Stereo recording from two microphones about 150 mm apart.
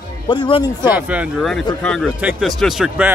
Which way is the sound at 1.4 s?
Centre (ahead or behind).